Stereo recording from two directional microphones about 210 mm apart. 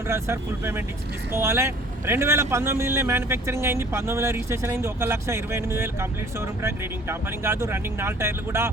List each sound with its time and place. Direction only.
0.1 s speech: 10° right (ahead or behind)